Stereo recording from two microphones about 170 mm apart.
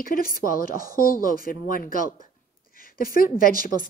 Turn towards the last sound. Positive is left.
turn(degrees=55)  # may be behind; listen again after turning